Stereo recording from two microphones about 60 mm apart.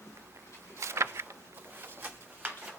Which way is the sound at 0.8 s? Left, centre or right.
Right.